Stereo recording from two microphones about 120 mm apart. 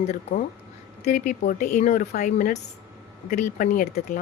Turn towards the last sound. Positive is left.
turn(degrees=90)